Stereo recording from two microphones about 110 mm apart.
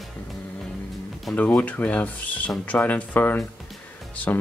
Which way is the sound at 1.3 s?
15° left (ahead or behind).